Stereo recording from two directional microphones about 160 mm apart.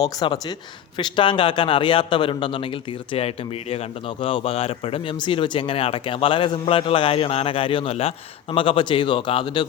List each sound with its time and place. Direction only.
0.0 s speech: 25° left (ahead or behind)